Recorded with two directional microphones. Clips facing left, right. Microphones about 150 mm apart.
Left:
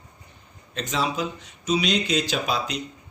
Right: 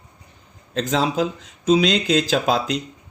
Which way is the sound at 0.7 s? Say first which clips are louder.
Right 6 dB; 90° right.